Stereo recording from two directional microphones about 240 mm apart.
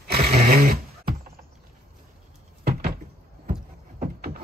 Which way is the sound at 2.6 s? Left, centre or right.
Right.